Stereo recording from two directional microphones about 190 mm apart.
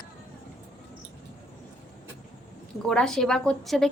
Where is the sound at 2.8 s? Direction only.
5° left (ahead or behind).